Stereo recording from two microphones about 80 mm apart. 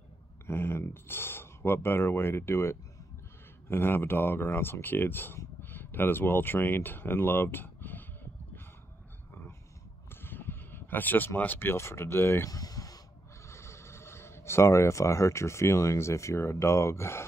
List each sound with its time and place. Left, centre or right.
0.5 s speech: left
10.2 s speech: left
12.4 s a sound: left
13.5 s speech: left